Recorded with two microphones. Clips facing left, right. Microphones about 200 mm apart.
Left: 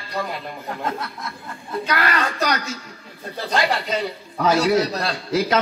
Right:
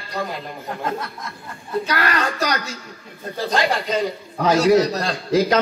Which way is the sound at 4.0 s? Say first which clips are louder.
Right 1 dB; 35° right (ahead or behind).